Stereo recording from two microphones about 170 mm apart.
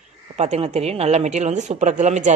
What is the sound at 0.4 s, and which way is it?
Speech, 40° right (ahead or behind).